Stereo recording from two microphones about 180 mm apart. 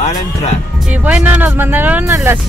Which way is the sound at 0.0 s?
35° left (ahead or behind).